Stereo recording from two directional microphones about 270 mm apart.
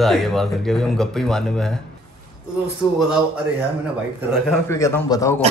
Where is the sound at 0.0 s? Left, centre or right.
Centre.